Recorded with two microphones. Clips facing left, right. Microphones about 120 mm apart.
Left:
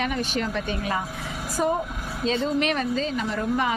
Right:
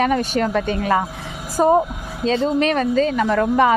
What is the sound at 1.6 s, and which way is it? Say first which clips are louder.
A woman's voice: right 9 dB; 35° right (ahead or behind).